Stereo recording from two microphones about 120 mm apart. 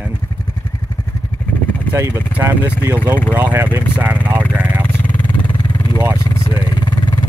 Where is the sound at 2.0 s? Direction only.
15° right (ahead or behind).